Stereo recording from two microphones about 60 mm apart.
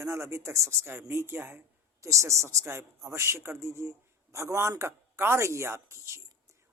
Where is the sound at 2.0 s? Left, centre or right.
Right.